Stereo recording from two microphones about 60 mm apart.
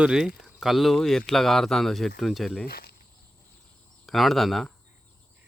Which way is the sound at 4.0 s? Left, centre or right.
Centre.